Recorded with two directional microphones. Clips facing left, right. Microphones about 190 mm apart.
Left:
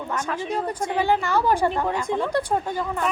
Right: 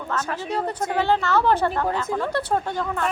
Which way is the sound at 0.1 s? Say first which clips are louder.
Right 1 dB; 10° left (ahead or behind).